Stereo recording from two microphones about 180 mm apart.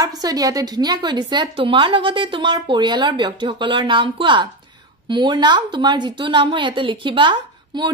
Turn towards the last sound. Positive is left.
turn(degrees=-25)  # may be behind; listen again after turning